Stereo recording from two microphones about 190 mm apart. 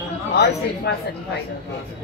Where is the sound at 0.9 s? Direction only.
65° left (ahead or behind).